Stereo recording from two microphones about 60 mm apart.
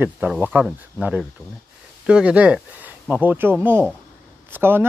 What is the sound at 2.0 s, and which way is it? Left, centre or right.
Speech, centre.